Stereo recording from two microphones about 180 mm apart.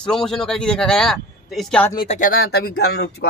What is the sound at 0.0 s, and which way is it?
Speech, 5° left (ahead or behind).